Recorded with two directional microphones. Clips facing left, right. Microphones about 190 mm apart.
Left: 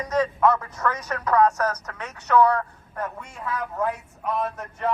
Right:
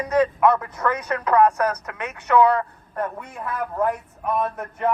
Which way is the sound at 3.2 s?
55° right (ahead or behind).